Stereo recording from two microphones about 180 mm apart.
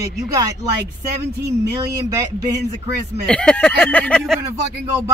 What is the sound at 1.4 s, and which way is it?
Speech, 20° right (ahead or behind).